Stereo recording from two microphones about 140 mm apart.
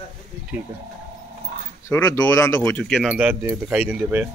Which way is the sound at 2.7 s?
Centre (ahead or behind).